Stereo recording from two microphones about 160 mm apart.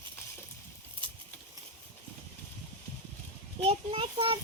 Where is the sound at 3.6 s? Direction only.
35° right (ahead or behind).